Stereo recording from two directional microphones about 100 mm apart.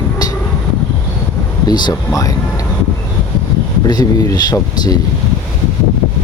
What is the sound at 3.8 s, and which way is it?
Speech, 40° left (ahead or behind).